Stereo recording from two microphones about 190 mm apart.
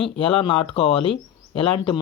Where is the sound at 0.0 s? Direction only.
25° left (ahead or behind).